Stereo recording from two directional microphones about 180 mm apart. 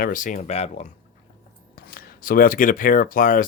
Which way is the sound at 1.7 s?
55° left (ahead or behind).